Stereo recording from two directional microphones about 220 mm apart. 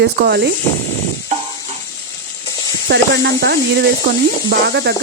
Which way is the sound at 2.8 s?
50° right (ahead or behind).